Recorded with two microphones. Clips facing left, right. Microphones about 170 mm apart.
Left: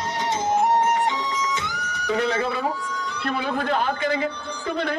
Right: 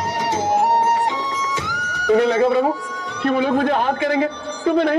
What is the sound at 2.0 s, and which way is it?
Speech, 35° right (ahead or behind).